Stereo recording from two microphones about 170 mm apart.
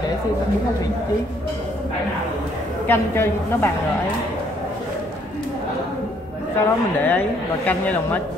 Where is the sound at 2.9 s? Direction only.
15° left (ahead or behind).